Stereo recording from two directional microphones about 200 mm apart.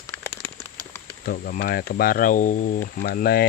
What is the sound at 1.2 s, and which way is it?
Speech, 45° left (ahead or behind).